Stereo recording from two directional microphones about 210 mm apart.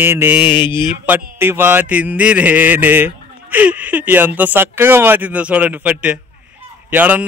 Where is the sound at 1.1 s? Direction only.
10° right (ahead or behind).